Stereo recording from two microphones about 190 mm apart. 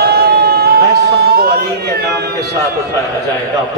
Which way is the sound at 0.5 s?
55° right (ahead or behind).